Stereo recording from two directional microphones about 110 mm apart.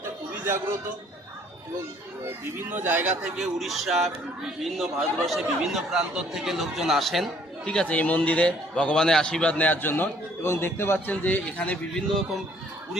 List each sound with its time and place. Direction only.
2.2 s speech: 20° right (ahead or behind)
3.3 s a man's voice: 5° right (ahead or behind); by 12.2 s 10° left (ahead or behind)